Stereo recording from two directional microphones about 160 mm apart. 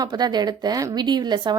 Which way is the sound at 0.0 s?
25° right (ahead or behind).